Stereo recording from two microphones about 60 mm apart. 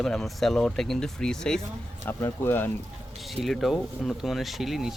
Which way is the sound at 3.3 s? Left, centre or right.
Centre.